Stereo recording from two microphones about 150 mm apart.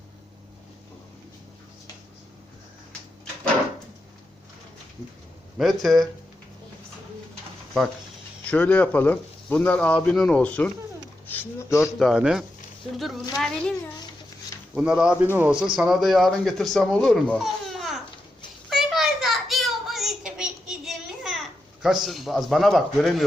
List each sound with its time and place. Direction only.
5.5 s speech: centre (ahead or behind)
8.4 s speech: 10° left (ahead or behind)
11.3 s speech: 20° left (ahead or behind)
11.9 s speech: centre (ahead or behind)
14.8 s a man's voice: 5° right (ahead or behind)
18.7 s child singing: centre (ahead or behind)